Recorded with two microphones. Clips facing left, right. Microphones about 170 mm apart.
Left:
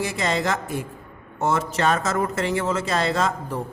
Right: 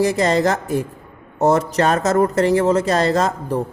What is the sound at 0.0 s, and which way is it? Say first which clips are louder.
A woman's voice: right 8 dB; 40° right (ahead or behind).